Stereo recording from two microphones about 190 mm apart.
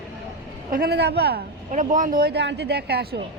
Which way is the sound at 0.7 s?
55° right (ahead or behind).